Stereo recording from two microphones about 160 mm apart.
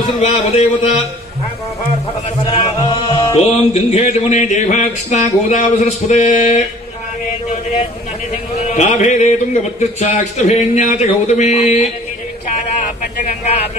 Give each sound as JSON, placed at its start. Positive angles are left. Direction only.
{"t": 0.2, "sound": "a man's voice", "side_deg": 45}
{"t": 2.4, "sound": "music", "side_deg": 30}
{"t": 3.7, "sound": "a man's voice", "side_deg": 40}
{"t": 8.5, "sound": "a man's voice", "side_deg": 45}